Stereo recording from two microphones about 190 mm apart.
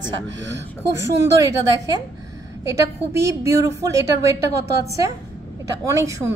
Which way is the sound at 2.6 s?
15° right (ahead or behind).